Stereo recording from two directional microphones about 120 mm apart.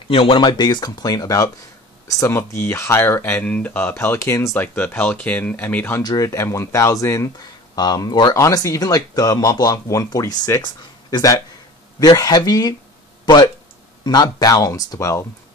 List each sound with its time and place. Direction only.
0.1 s speech: 50° left (ahead or behind)
0.4 s speech: 35° left (ahead or behind); by 5.9 s 15° left (ahead or behind)
6.0 s speech: 25° left (ahead or behind)